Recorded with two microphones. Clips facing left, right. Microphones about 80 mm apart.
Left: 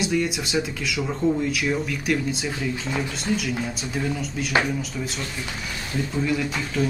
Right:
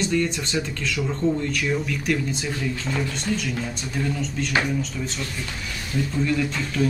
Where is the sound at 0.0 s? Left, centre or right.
Centre.